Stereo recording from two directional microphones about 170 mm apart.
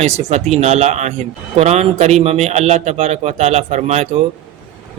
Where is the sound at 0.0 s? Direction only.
40° right (ahead or behind).